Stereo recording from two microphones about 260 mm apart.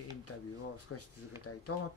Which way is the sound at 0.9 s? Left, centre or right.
Left.